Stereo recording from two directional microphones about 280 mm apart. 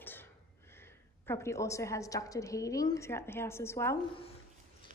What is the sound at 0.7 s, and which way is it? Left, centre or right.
A woman's voice, centre.